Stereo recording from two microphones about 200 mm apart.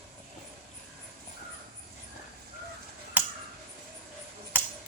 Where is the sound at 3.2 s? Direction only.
10° right (ahead or behind).